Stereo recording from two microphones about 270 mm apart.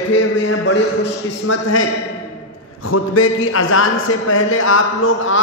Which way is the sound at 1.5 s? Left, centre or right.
Left.